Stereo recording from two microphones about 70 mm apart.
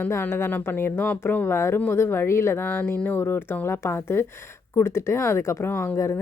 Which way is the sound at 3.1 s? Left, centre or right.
Left.